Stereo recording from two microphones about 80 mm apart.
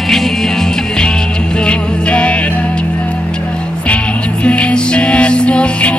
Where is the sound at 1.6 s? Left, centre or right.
Centre.